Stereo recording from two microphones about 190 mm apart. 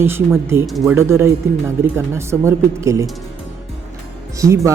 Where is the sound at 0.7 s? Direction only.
Centre (ahead or behind).